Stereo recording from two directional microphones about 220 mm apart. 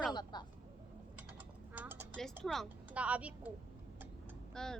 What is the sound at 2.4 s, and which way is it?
Speech, centre (ahead or behind).